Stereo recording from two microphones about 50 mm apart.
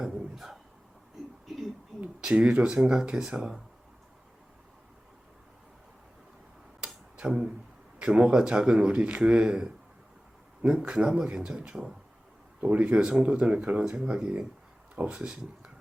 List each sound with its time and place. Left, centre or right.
0.0 s a sound: centre
2.2 s speech: centre
6.8 s tick-tock: centre
7.9 s speech: centre
10.8 s speech: centre